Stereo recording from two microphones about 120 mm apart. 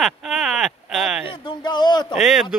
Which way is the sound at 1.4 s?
40° left (ahead or behind).